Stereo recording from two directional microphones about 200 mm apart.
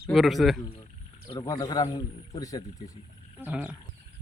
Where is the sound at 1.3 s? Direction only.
20° left (ahead or behind).